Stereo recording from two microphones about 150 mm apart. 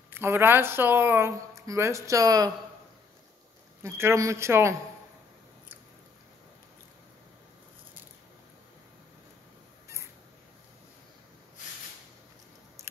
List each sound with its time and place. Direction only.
0.1 s speech: 15° right (ahead or behind)
3.8 s speech: 20° right (ahead or behind)